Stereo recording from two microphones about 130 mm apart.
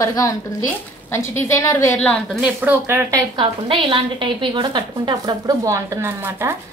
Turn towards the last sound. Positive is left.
turn(degrees=-20)  # may be behind; listen again after turning